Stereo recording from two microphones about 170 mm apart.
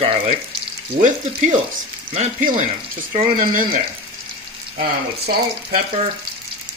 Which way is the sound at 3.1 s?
50° right (ahead or behind).